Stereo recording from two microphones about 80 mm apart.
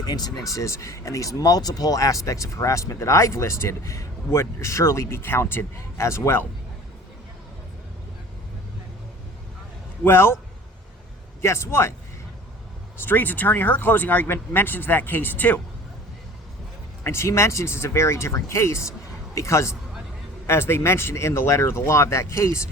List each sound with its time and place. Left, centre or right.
0.0 s speech: left
0.5 s speech: left
10.0 s speech: left
11.4 s speech: left
13.0 s speech: left
17.0 s speech: left